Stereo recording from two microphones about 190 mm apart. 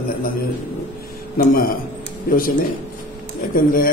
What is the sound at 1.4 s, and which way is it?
Speech, 50° left (ahead or behind).